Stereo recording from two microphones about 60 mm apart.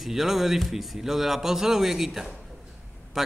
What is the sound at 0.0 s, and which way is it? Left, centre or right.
Speech, centre.